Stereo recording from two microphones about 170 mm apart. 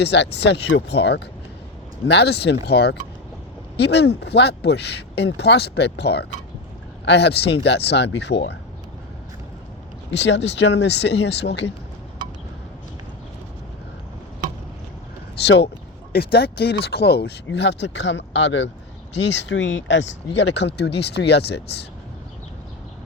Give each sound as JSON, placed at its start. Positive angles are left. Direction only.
{"t": 0.0, "sound": "speech", "side_deg": 90}
{"t": 10.1, "sound": "speech", "side_deg": 90}
{"t": 15.4, "sound": "speech", "side_deg": 80}
{"t": 16.1, "sound": "speech", "side_deg": 65}